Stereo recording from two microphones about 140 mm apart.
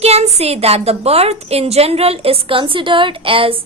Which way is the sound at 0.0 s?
50° right (ahead or behind).